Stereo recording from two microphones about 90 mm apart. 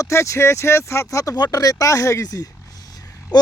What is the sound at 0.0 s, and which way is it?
Speech, 30° left (ahead or behind).